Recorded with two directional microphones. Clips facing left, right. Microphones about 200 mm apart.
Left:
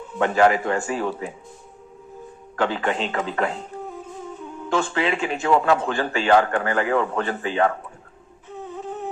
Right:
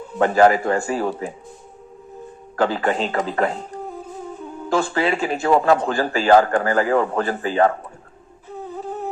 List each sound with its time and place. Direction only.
0.1 s speech: 40° right (ahead or behind)
2.6 s speech: 40° right (ahead or behind)
8.4 s humming: 35° right (ahead or behind)